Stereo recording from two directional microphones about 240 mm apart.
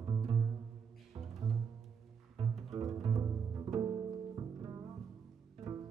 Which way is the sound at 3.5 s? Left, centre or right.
Right.